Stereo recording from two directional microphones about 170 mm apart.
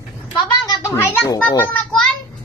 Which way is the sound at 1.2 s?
20° left (ahead or behind).